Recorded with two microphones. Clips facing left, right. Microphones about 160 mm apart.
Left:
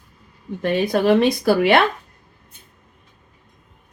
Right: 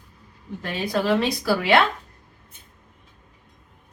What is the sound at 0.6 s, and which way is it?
A woman's voice, 60° left (ahead or behind).